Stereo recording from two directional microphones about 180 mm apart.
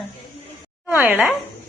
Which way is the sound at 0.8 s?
10° right (ahead or behind).